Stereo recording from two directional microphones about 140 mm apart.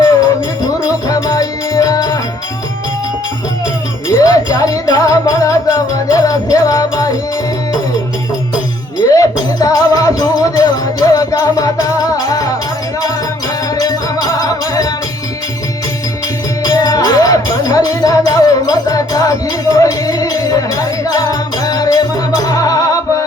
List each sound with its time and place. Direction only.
0.9 s music: 25° left (ahead or behind)
4.1 s music: 25° left (ahead or behind)
9.0 s music: 25° left (ahead or behind)
13.7 s music: 25° left (ahead or behind)
16.6 s music: 25° left (ahead or behind)